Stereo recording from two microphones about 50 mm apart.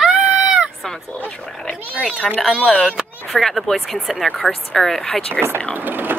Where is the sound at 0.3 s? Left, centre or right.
Right.